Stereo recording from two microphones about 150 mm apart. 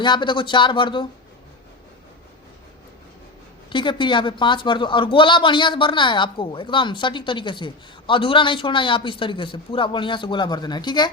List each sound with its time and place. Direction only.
0.0 s speech: 30° left (ahead or behind)
3.7 s speech: 30° left (ahead or behind)